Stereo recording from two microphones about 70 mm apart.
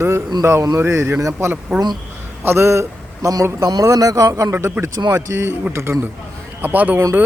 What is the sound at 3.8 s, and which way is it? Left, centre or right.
Speech, right.